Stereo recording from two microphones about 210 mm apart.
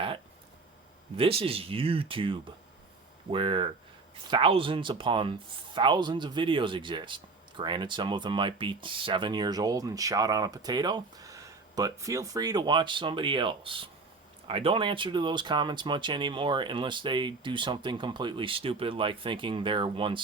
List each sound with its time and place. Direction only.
1.1 s speech: 25° right (ahead or behind)